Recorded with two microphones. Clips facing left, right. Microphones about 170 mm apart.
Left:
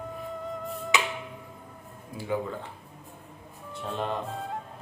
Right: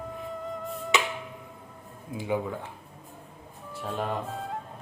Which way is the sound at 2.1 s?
15° right (ahead or behind).